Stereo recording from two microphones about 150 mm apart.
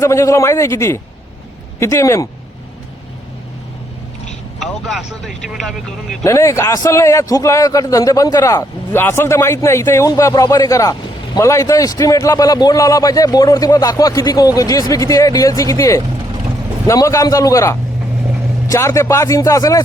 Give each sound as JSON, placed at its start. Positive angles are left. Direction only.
{"t": 0.0, "sound": "a man's voice", "side_deg": 20}
{"t": 4.6, "sound": "speech", "side_deg": 0}
{"t": 6.2, "sound": "a man's voice", "side_deg": 20}